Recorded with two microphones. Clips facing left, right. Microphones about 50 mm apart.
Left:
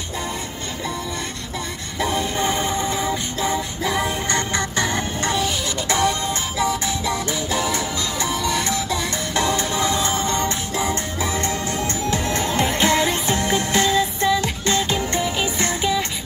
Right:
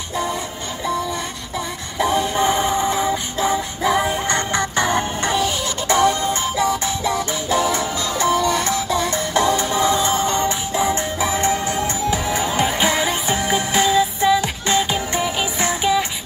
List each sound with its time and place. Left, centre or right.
2.0 s music: right